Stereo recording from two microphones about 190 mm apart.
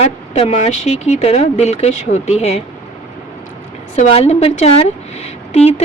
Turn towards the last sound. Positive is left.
turn(degrees=35)  # may be behind; listen again after turning